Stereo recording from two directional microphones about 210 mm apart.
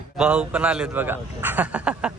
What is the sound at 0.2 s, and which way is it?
A man's voice, 5° right (ahead or behind).